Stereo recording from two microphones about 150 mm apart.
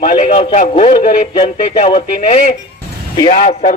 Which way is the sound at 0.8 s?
35° left (ahead or behind).